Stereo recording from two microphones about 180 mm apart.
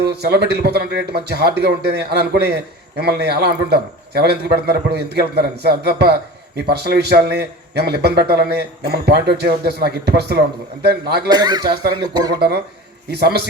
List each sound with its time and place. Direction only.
0.0 s a man's voice: 65° right (ahead or behind)
11.3 s a man's voice: 25° right (ahead or behind)
13.1 s a man's voice: 60° right (ahead or behind)